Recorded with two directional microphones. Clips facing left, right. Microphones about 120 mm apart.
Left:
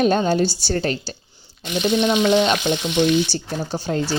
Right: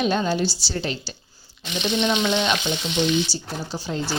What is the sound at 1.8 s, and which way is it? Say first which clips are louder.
Frying: left 4 dB; 10° left (ahead or behind).